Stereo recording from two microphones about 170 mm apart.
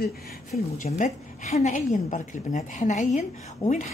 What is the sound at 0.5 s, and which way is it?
A woman's voice, 45° left (ahead or behind).